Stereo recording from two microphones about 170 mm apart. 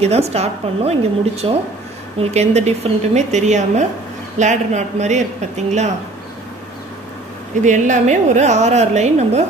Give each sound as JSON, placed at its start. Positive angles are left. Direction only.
{"t": 0.0, "sound": "a woman's voice", "side_deg": -40}
{"t": 7.6, "sound": "a woman's voice", "side_deg": -45}